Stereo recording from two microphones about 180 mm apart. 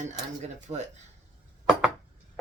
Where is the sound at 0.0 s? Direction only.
40° right (ahead or behind).